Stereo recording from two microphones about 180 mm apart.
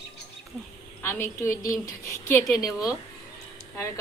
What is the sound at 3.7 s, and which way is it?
Speech, 15° left (ahead or behind).